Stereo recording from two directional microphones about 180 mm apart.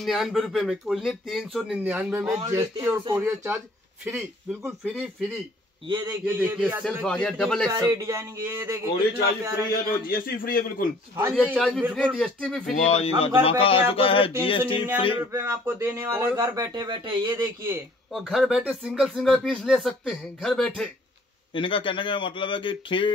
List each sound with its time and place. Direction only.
0.0 s speech: centre (ahead or behind)
2.2 s speech: 20° right (ahead or behind)
4.6 s speech: 10° right (ahead or behind)
5.9 s a man's voice: 25° right (ahead or behind)
6.2 s speech: 10° right (ahead or behind)
7.1 s speech: 5° left (ahead or behind)
7.7 s speech: 20° right (ahead or behind)
10.0 s a man's voice: 55° left (ahead or behind)
11.3 s speech: centre (ahead or behind)
11.8 s speech: 5° right (ahead or behind)
12.7 s a man's voice: 35° left (ahead or behind)
15.3 s speech: 15° right (ahead or behind)
18.1 s speech: 5° right (ahead or behind)
21.5 s a man's voice: 30° left (ahead or behind)